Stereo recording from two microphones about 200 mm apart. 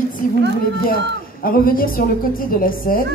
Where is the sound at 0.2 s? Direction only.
40° left (ahead or behind).